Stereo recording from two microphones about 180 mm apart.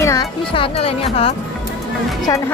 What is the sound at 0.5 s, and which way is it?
Speech, 30° left (ahead or behind).